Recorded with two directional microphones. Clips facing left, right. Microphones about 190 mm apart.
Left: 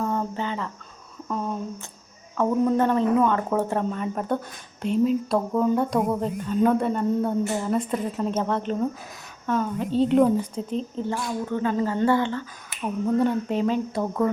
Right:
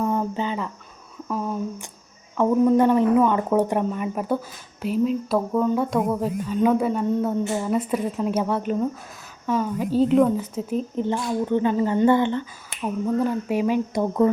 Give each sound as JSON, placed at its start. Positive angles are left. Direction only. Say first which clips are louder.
{"t": 0.0, "sound": "a sound", "louder": "right 3 dB", "side_deg": -15}
{"t": 1.3, "sound": "speech", "louder": "right 2 dB", "side_deg": -5}
{"t": 11.0, "sound": "a woman's voice", "louder": "right 4 dB", "side_deg": -20}
{"t": 12.8, "sound": "speech", "louder": "even", "side_deg": 0}